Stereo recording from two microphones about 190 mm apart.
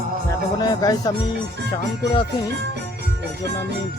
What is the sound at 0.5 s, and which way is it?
Speech, 20° left (ahead or behind).